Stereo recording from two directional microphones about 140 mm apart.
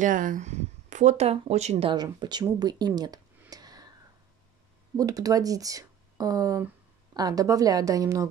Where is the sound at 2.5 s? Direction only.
30° right (ahead or behind).